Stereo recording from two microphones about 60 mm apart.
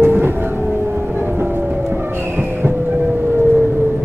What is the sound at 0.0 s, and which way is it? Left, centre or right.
Music, right.